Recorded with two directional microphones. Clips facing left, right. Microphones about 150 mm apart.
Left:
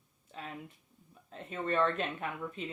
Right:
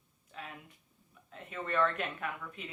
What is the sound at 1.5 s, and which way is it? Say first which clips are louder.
Speech: left 1 dB; 25° left (ahead or behind).